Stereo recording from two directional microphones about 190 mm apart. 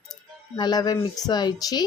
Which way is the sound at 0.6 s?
20° left (ahead or behind).